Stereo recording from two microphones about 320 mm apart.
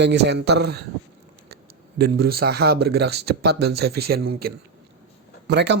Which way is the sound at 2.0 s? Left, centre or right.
Right.